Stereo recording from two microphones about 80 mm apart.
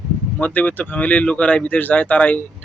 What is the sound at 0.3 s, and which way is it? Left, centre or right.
A man's voice, centre.